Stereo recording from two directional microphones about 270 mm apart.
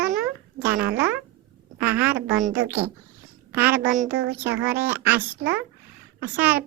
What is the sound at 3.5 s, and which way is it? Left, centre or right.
Speech, centre.